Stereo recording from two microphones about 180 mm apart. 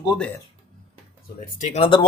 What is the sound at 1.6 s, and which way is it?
Speech, 40° left (ahead or behind).